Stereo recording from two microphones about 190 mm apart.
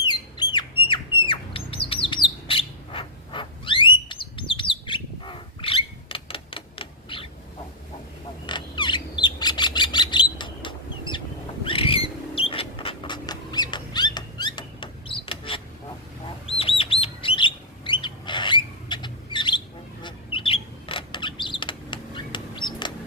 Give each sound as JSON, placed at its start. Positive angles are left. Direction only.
{"t": 0.0, "sound": "bird", "side_deg": 20}
{"t": 5.2, "sound": "a sound", "side_deg": 30}
{"t": 8.4, "sound": "bird", "side_deg": 25}
{"t": 11.6, "sound": "mouse", "side_deg": 30}
{"t": 16.5, "sound": "bird", "side_deg": 30}